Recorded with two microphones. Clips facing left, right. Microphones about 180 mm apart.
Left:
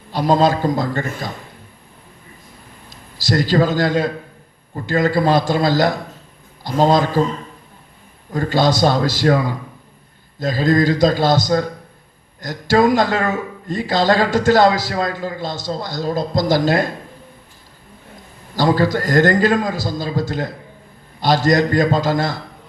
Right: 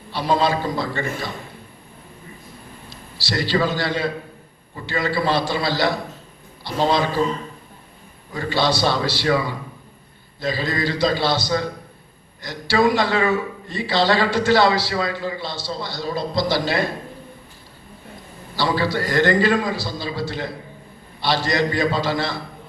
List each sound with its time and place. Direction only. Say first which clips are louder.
0.1 s speech: left 5 dB; 45° left (ahead or behind)
2.9 s a man's voice: left 7 dB; 45° left (ahead or behind)
8.3 s speech: left 4 dB; 45° left (ahead or behind)
18.5 s speech: left 5 dB; 45° left (ahead or behind)